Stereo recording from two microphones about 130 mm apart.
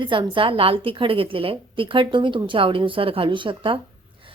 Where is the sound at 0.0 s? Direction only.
40° right (ahead or behind).